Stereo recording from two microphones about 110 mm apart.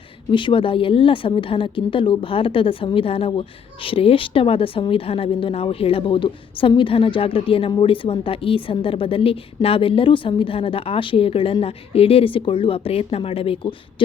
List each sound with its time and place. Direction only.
0.3 s a woman's voice: 50° left (ahead or behind)